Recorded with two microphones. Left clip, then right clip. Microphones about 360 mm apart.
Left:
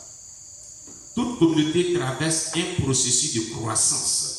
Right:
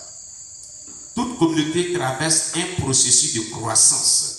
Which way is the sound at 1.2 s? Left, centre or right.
Centre.